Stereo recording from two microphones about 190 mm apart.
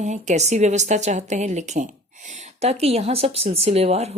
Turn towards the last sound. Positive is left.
turn(degrees=-35)  # may be behind; listen again after turning